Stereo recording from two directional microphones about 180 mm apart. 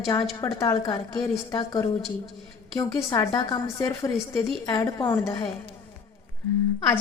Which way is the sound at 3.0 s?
25° left (ahead or behind).